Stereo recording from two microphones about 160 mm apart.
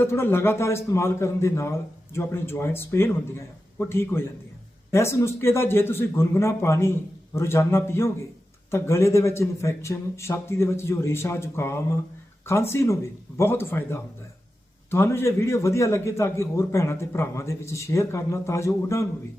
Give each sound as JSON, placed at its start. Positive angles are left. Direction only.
{"t": 0.0, "sound": "a man's voice", "side_deg": 15}